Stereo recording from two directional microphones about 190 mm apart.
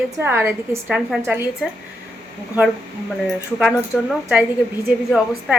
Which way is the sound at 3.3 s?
Centre (ahead or behind).